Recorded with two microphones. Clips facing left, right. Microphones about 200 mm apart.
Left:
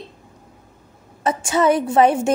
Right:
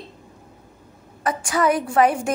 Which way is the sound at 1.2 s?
25° left (ahead or behind).